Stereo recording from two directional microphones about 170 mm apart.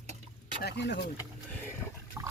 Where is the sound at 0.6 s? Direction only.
85° left.